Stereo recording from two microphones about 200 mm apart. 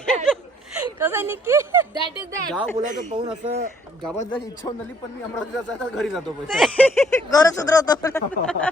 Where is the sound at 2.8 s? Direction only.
40° right (ahead or behind).